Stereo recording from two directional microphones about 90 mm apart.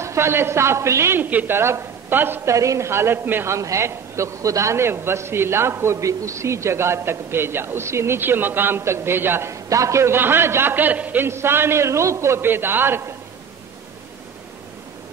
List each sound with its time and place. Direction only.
0.0 s a man's voice: 30° right (ahead or behind)
2.5 s a man's voice: 35° right (ahead or behind)